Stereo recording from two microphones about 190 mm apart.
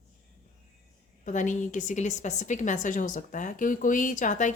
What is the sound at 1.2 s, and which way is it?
A woman's voice, 40° left (ahead or behind).